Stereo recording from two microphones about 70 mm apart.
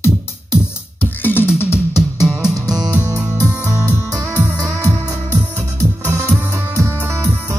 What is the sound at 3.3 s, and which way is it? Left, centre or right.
Music, left.